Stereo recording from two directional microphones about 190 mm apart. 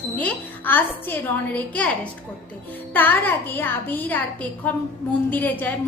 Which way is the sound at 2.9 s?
10° left (ahead or behind).